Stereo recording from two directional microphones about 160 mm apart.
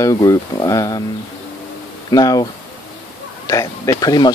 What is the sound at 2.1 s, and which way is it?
Speech, 25° left (ahead or behind).